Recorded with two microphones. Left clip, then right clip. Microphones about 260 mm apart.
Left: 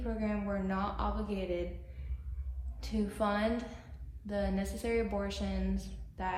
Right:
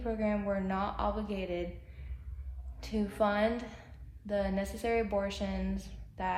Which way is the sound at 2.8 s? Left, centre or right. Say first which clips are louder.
Right 3 dB; right.